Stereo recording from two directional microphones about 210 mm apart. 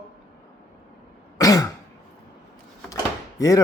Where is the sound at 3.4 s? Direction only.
15° left (ahead or behind).